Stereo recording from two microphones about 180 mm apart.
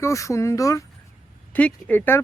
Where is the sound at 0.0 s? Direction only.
15° left (ahead or behind).